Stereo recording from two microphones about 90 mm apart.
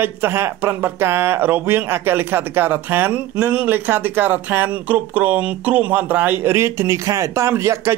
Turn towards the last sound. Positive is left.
turn(degrees=-30)  # may be behind; listen again after turning